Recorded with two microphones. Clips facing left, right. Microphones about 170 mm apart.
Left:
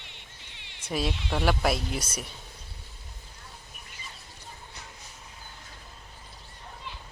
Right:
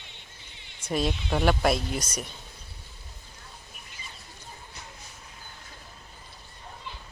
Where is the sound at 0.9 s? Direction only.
5° left (ahead or behind).